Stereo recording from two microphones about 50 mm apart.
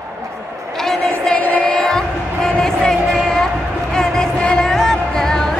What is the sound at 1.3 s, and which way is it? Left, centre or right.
Music, left.